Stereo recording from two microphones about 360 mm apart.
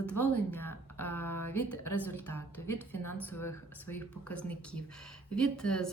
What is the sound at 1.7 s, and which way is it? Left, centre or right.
Speech, left.